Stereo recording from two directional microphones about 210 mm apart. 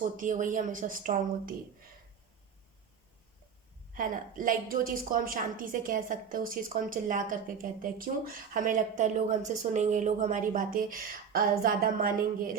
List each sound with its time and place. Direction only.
0.0 s a woman's voice: 40° right (ahead or behind)
3.9 s a woman's voice: 40° right (ahead or behind)